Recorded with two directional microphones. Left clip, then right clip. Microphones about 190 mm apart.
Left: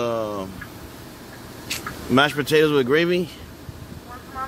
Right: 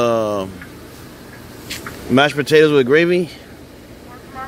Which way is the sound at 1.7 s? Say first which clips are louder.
Right 3 dB; centre (ahead or behind).